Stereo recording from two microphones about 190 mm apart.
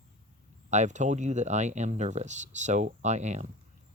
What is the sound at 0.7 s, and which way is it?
Speech, 40° right (ahead or behind).